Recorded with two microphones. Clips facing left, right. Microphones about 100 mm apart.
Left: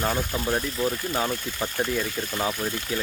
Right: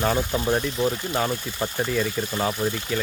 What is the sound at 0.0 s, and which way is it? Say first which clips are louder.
Speech: right 3 dB; 10° right (ahead or behind).